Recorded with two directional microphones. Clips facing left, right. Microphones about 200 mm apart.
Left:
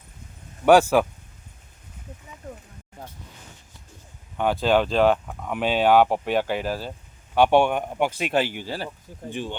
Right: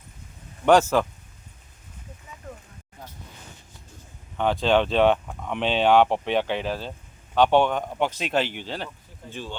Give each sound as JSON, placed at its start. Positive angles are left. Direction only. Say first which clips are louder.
{"t": 0.6, "sound": "speech", "louder": "left 2 dB", "side_deg": 10}
{"t": 4.4, "sound": "speech", "louder": "even", "side_deg": 5}